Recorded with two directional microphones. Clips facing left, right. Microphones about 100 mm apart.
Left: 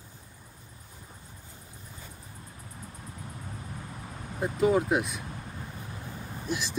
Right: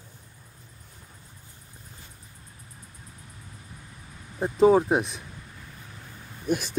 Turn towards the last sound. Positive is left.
turn(degrees=-55)  # may be behind; listen again after turning